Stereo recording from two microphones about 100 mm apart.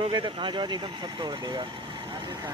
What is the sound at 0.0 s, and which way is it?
Speech, 55° right (ahead or behind).